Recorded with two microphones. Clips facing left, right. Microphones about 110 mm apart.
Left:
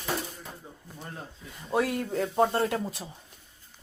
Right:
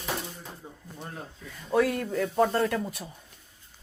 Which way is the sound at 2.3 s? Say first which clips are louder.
Even; 20° left (ahead or behind).